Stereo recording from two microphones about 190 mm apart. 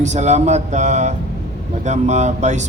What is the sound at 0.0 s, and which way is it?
A man's voice, 40° right (ahead or behind).